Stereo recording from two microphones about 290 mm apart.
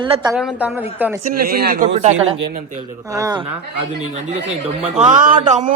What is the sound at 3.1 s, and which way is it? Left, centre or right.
Speech, centre.